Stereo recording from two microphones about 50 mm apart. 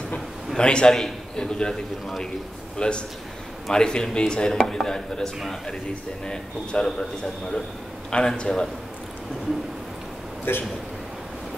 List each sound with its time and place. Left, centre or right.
0.6 s a man's voice: centre
2.8 s a man's voice: centre
10.5 s speech: left